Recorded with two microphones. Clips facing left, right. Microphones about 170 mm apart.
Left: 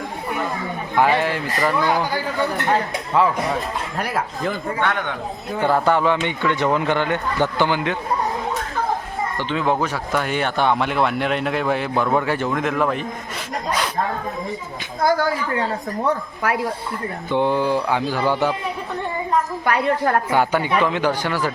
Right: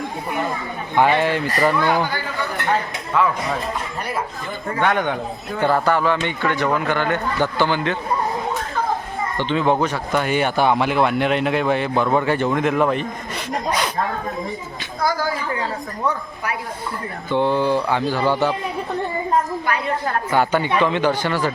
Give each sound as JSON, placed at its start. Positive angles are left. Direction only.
{"t": 0.9, "sound": "speech", "side_deg": 0}
{"t": 3.1, "sound": "speech", "side_deg": 30}
{"t": 4.8, "sound": "a man's voice", "side_deg": -15}
{"t": 5.5, "sound": "a man's voice", "side_deg": 10}
{"t": 9.4, "sound": "speech", "side_deg": 5}
{"t": 15.0, "sound": "speech", "side_deg": 60}
{"t": 17.3, "sound": "speech", "side_deg": 15}
{"t": 19.6, "sound": "a woman's voice", "side_deg": 65}
{"t": 20.3, "sound": "speech", "side_deg": 10}